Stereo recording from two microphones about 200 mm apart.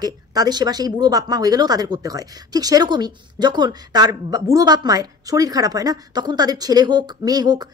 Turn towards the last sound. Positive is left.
turn(degrees=-20)  # may be behind; listen again after turning